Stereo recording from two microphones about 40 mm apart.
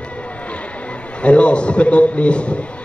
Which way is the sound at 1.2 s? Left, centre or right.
Left.